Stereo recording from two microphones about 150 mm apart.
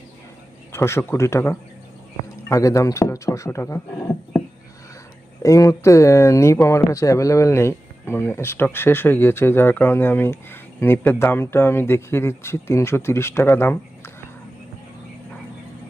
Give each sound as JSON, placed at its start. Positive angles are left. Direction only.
{"t": 0.7, "sound": "speech", "side_deg": 15}
{"t": 5.4, "sound": "speech", "side_deg": 20}